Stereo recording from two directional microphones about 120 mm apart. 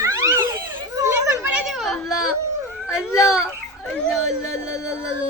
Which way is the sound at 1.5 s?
5° right (ahead or behind).